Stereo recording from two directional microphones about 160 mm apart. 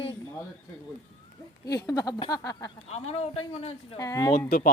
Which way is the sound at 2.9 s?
45° left (ahead or behind).